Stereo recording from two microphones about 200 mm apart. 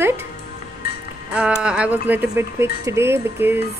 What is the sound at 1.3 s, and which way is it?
A woman's voice, 5° right (ahead or behind).